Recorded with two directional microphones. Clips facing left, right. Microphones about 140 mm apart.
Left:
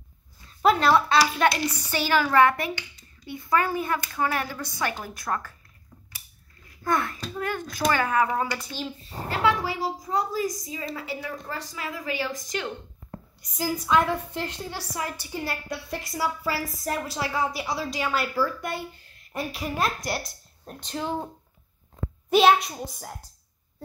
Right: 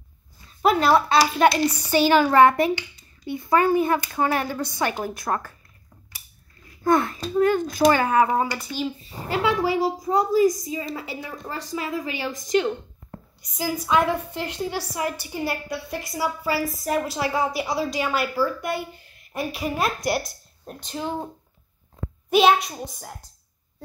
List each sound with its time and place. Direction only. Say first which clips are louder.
0.6 s a woman's voice: right 2 dB; 10° right (ahead or behind)
6.8 s a woman's voice: right 6 dB; 25° right (ahead or behind)
8.5 s a woman's voice: right 4 dB; 5° right (ahead or behind)
13.4 s a woman's voice: right 1 dB; 5° right (ahead or behind)
22.3 s a woman's voice: right 1 dB; centre (ahead or behind)